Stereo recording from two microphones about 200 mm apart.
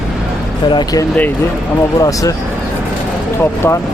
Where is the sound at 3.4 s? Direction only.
10° left (ahead or behind).